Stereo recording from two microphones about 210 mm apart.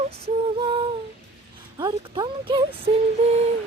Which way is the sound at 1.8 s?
20° right (ahead or behind).